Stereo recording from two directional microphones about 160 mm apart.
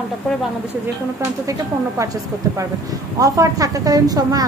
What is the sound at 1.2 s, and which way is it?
Speech, 20° right (ahead or behind).